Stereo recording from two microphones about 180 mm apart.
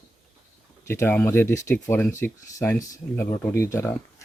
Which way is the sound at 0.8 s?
15° left (ahead or behind).